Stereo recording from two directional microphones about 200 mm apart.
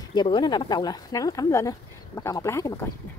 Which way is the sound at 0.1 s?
20° left (ahead or behind).